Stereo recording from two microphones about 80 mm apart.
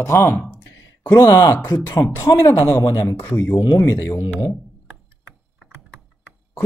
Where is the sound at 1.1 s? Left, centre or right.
Left.